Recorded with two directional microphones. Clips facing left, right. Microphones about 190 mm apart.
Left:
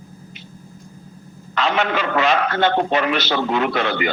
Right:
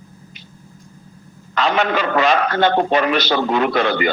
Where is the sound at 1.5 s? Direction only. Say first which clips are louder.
Right 2 dB; 40° right (ahead or behind).